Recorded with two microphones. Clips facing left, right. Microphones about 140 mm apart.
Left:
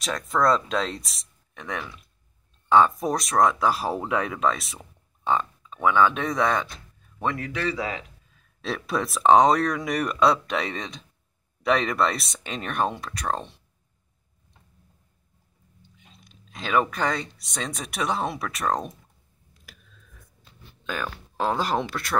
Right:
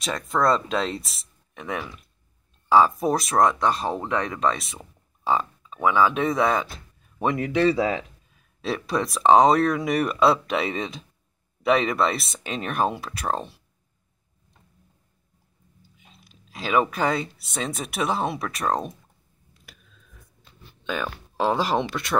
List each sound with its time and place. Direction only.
0.0 s speech: centre (ahead or behind)
7.2 s speech: 20° right (ahead or behind)
8.5 s speech: centre (ahead or behind)
15.8 s speech: 5° right (ahead or behind)
19.6 s a sound: centre (ahead or behind)
20.8 s speech: centre (ahead or behind)